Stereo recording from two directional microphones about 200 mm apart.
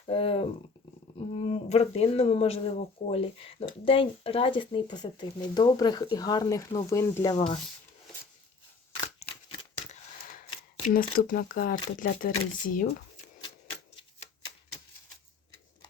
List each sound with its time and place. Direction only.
0.0 s a sound: 30° left (ahead or behind)
1.4 s speech: 30° left (ahead or behind); by 7.3 s 15° left (ahead or behind)
10.8 s speech: 45° left (ahead or behind)